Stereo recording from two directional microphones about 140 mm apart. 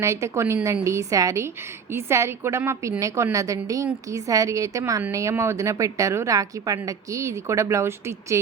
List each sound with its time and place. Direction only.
0.0 s speech: 20° right (ahead or behind)